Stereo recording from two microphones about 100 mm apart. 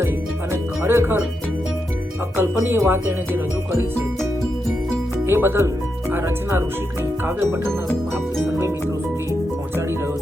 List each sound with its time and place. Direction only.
0.5 s music: 25° right (ahead or behind)
2.3 s music: 20° right (ahead or behind)
5.2 s speech: 25° right (ahead or behind)
7.3 s music: 25° right (ahead or behind)